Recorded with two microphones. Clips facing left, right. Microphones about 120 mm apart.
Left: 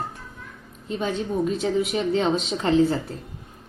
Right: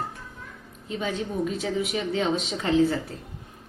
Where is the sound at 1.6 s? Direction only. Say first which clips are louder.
Left 4 dB; 30° left (ahead or behind).